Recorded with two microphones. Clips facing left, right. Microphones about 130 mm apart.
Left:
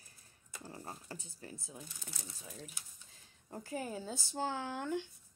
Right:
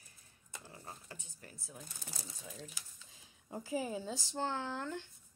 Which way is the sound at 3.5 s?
5° right (ahead or behind).